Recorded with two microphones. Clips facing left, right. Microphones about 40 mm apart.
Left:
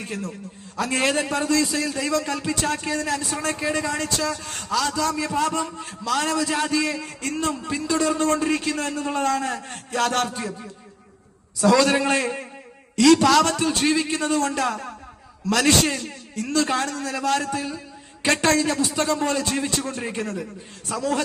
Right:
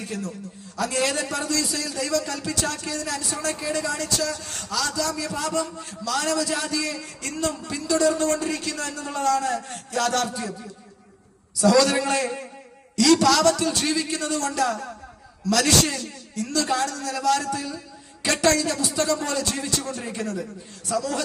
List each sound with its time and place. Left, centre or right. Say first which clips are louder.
0.0 s a man's voice: even; left